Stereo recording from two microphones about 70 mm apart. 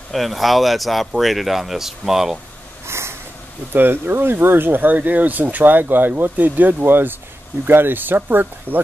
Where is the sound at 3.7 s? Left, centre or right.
Right.